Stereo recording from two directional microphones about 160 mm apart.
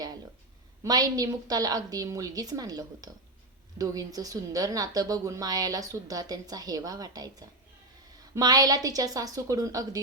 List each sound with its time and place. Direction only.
0.9 s a woman's voice: 25° right (ahead or behind)